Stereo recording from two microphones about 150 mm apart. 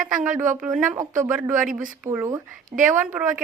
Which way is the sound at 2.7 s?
60° right (ahead or behind).